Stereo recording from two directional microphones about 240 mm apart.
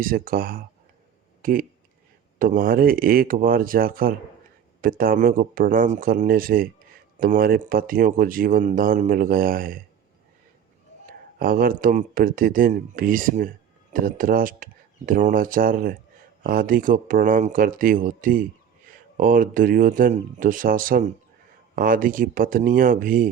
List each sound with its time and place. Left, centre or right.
0.0 s speech: right
11.3 s speech: right